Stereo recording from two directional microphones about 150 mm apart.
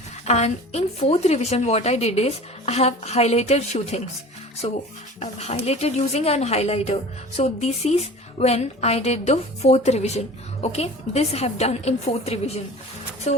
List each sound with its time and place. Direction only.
0.3 s speech: 45° left (ahead or behind)